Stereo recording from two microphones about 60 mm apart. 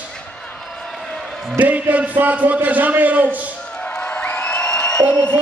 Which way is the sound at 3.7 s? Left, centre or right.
Centre.